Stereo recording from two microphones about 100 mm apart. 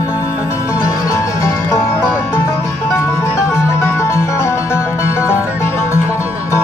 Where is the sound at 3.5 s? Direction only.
25° left (ahead or behind).